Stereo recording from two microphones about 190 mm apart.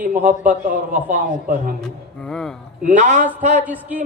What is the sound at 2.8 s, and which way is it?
Speech, 40° right (ahead or behind).